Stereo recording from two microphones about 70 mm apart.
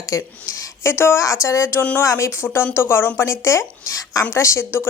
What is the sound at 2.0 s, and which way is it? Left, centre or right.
Speech, left.